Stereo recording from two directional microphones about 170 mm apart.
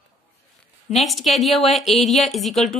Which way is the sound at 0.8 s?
Centre (ahead or behind).